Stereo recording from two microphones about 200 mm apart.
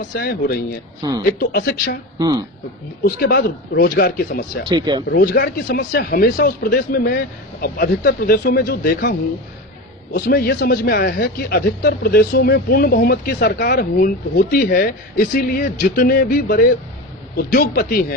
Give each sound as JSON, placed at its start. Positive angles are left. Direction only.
{"t": 0.1, "sound": "speech", "side_deg": 55}
{"t": 2.1, "sound": "speech", "side_deg": -20}
{"t": 3.0, "sound": "speech", "side_deg": 50}
{"t": 4.7, "sound": "speech", "side_deg": -20}
{"t": 5.1, "sound": "speech", "side_deg": 50}